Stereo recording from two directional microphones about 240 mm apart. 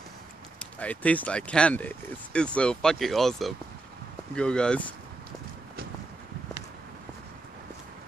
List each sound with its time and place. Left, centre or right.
0.6 s speech: centre